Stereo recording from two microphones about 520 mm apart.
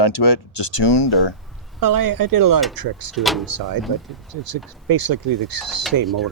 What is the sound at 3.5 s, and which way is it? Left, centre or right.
Speech, right.